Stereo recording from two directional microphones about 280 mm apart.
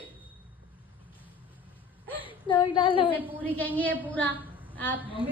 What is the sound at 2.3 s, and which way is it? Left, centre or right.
Speech, centre.